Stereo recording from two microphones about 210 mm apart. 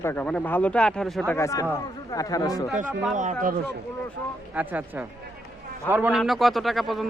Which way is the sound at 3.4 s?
50° right (ahead or behind).